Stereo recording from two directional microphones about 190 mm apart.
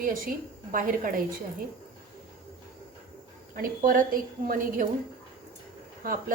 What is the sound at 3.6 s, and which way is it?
A woman's voice, 45° right (ahead or behind).